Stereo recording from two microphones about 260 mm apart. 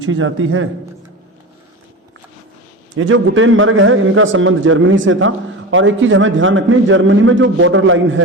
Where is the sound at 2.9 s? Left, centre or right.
Right.